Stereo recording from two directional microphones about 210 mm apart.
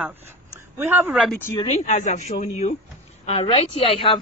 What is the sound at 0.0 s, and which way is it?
Speech, 10° right (ahead or behind).